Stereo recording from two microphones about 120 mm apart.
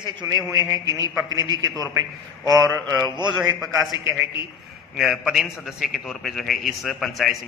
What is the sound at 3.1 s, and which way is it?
Speech, 40° right (ahead or behind).